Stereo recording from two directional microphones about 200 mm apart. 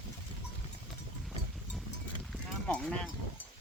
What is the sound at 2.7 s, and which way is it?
Speech, 5° left (ahead or behind).